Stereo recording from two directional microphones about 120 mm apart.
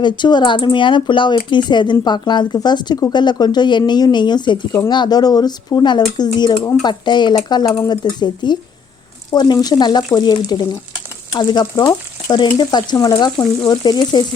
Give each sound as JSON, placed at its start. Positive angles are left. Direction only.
{"t": 0.0, "sound": "speech", "side_deg": 40}